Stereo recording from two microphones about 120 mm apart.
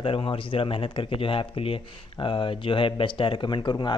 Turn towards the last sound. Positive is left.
turn(degrees=40)  # may be behind; listen again after turning